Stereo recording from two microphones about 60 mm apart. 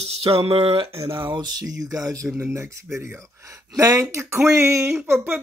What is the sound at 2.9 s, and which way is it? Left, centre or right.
Speech, right.